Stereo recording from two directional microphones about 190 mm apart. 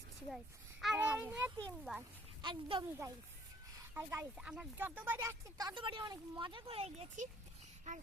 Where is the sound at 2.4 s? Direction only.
25° right (ahead or behind).